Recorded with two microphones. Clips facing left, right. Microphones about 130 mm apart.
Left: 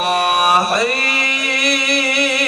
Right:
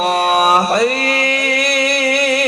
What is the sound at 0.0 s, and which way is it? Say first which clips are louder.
Mantra: right 2 dB; 40° right (ahead or behind).